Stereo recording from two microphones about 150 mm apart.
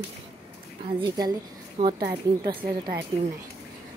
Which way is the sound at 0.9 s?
30° right (ahead or behind).